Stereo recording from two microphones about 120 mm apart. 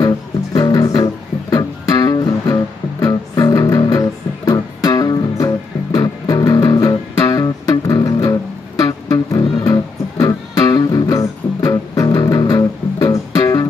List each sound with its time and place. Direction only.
0.6 s music: 30° left (ahead or behind)